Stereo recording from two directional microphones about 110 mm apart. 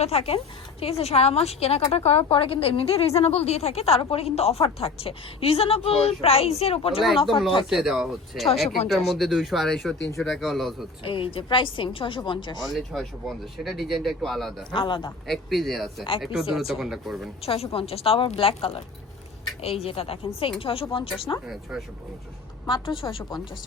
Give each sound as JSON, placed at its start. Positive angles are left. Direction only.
{"t": 0.0, "sound": "speech", "side_deg": 65}
{"t": 7.7, "sound": "speech", "side_deg": -5}
{"t": 11.0, "sound": "a woman's voice", "side_deg": 55}
{"t": 12.6, "sound": "speech", "side_deg": 0}
{"t": 14.7, "sound": "a woman's voice", "side_deg": 45}
{"t": 15.3, "sound": "speech", "side_deg": 0}
{"t": 17.4, "sound": "speech", "side_deg": 60}
{"t": 21.4, "sound": "speech", "side_deg": -5}
{"t": 23.0, "sound": "a woman's voice", "side_deg": 50}